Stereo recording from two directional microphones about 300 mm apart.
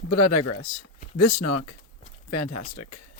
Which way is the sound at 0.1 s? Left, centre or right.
Left.